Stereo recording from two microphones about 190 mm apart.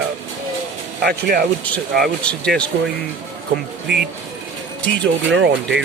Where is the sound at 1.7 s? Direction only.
10° left (ahead or behind).